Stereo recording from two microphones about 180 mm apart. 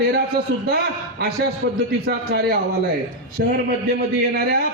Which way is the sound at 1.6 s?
65° right (ahead or behind).